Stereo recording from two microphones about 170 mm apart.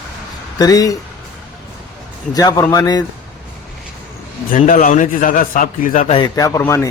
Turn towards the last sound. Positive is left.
turn(degrees=15)  # may be behind; listen again after turning